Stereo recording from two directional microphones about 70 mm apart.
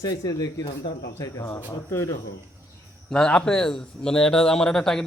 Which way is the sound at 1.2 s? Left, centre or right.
Left.